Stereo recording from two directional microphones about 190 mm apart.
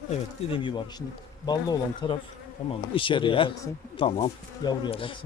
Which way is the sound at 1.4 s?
20° left (ahead or behind).